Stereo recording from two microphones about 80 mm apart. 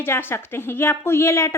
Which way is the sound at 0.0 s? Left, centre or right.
Left.